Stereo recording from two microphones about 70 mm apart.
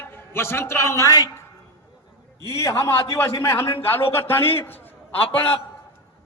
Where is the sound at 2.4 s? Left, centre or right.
Left.